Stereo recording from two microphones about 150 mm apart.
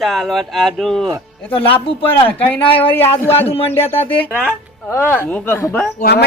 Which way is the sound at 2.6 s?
35° left (ahead or behind).